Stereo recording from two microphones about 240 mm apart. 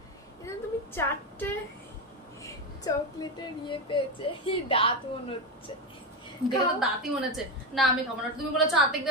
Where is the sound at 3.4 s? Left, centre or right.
Left.